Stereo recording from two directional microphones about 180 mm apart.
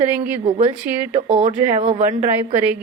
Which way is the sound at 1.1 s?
35° right (ahead or behind).